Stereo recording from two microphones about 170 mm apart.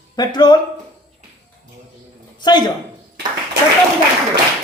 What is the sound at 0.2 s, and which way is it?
Speech, 25° left (ahead or behind).